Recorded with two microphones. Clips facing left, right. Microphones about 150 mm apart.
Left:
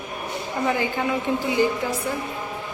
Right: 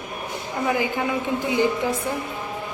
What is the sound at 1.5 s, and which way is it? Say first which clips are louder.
Speech: right 2 dB; 20° right (ahead or behind).